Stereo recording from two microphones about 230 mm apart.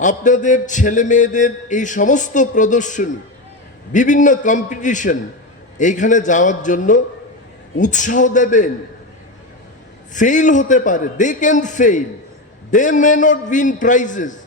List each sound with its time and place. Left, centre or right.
0.0 s a man's voice: left
10.2 s a man's voice: left